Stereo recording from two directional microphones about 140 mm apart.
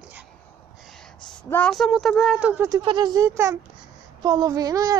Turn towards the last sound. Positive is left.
turn(degrees=-25)  # may be behind; listen again after turning